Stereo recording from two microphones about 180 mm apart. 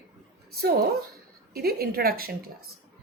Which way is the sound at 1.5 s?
60° right (ahead or behind).